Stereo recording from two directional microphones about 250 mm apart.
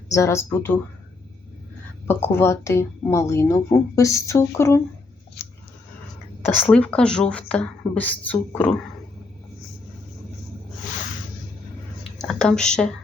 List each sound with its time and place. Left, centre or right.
0.1 s a woman's voice: centre
2.0 s a woman's voice: centre
6.4 s a woman's voice: centre
12.2 s speech: centre